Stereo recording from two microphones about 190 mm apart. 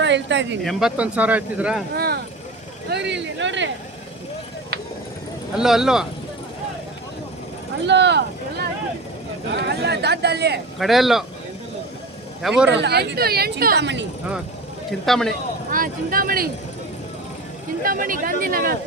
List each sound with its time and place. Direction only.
0.0 s speech: 70° right (ahead or behind)
0.6 s speech: centre (ahead or behind)
2.0 s vehicle: 55° right (ahead or behind)
2.9 s speech: 65° right (ahead or behind)
5.5 s speech: 5° right (ahead or behind)
7.9 s speech: 65° right (ahead or behind)
9.6 s speech: 60° right (ahead or behind)
10.8 s speech: centre (ahead or behind)
12.4 s speech: 5° right (ahead or behind)
12.8 s speech: 60° right (ahead or behind)
15.0 s speech: centre (ahead or behind)
15.7 s speech: 45° right (ahead or behind)
17.8 s speech: 45° right (ahead or behind)